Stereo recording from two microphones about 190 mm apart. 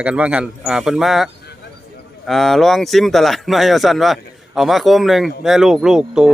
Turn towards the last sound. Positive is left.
turn(degrees=-5)  # may be behind; listen again after turning